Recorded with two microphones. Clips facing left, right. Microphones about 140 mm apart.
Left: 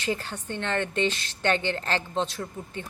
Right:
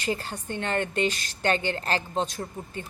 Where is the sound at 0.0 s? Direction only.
10° right (ahead or behind).